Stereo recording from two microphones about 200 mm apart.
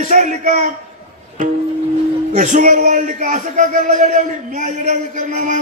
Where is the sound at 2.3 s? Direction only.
40° right (ahead or behind).